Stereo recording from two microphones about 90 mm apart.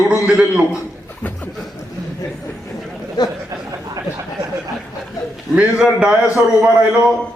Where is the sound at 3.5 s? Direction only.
40° right (ahead or behind).